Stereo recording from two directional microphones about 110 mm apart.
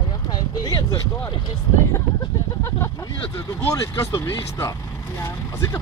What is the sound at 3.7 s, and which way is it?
Speech, 30° left (ahead or behind).